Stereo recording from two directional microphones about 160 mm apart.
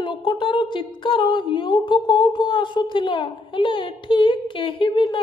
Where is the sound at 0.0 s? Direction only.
30° left (ahead or behind).